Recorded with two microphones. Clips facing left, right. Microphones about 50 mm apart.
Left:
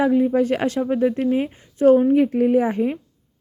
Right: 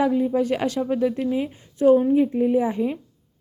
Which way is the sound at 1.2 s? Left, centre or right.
Left.